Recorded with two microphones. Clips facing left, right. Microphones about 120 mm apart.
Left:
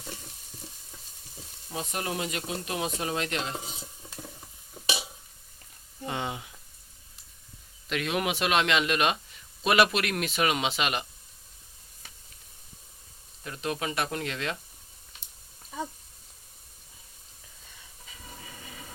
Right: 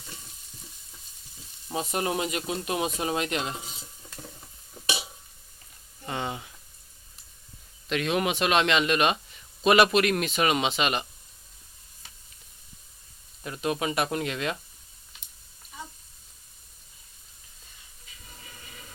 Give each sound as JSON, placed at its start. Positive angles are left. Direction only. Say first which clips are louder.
{"t": 1.7, "sound": "speech", "louder": "right 5 dB", "side_deg": -25}
{"t": 6.1, "sound": "a sound", "louder": "right 1 dB", "side_deg": 10}
{"t": 7.9, "sound": "speech", "louder": "right 3 dB", "side_deg": 5}
{"t": 13.4, "sound": "speech", "louder": "right 4 dB", "side_deg": -15}